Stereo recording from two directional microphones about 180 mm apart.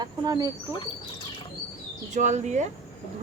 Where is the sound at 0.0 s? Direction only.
20° right (ahead or behind).